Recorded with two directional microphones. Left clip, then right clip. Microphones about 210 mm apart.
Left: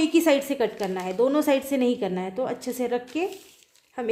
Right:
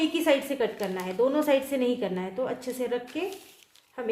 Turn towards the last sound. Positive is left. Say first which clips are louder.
# left 3 dB
turn(degrees=50)  # may be behind; listen again after turning